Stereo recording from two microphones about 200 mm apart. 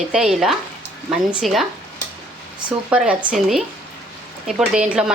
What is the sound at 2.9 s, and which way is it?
Speech, 5° right (ahead or behind).